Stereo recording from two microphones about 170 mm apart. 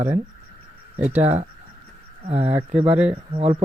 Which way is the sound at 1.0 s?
10° right (ahead or behind).